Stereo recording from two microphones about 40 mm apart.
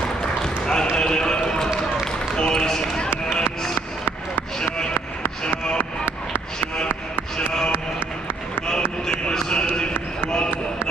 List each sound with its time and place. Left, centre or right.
0.4 s a sound: centre
2.3 s basketball bounce: centre
9.3 s basketball bounce: left